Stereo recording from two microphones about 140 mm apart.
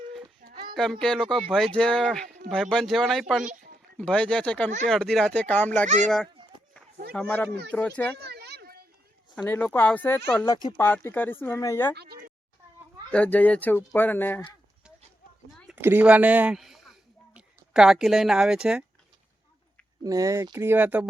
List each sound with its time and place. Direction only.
0.4 s a sound: 90° right
0.8 s speech: 5° left (ahead or behind)
3.4 s a sound: 70° right (ahead or behind)
3.9 s speech: 10° left (ahead or behind)
7.2 s speech: 5° left (ahead or behind)
9.3 s speech: 10° left (ahead or behind)
12.0 s a sound: 90° right
13.1 s speech: 10° left (ahead or behind)
15.7 s speech: 15° right (ahead or behind)
20.1 s speech: 25° right (ahead or behind)